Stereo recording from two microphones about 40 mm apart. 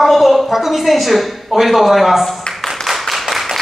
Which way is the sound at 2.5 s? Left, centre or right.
Left.